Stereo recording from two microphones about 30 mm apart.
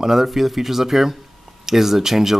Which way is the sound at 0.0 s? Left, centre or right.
Centre.